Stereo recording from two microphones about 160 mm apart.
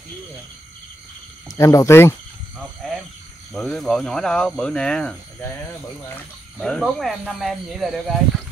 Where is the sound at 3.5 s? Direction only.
Centre (ahead or behind).